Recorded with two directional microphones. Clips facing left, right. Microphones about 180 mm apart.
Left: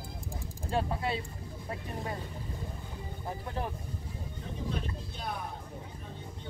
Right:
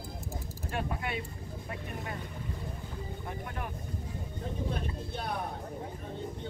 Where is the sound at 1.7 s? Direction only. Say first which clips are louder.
Left 3 dB; 30° left (ahead or behind).